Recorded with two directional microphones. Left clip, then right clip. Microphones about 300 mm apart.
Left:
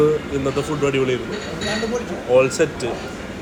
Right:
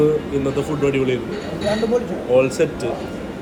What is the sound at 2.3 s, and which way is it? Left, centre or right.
Speech, centre.